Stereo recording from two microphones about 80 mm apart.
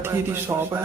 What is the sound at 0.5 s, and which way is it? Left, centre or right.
Speech, right.